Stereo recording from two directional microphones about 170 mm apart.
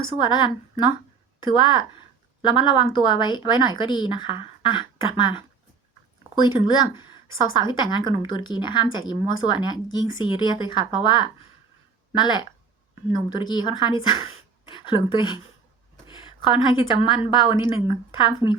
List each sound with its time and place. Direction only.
0.2 s a woman's voice: 25° left (ahead or behind)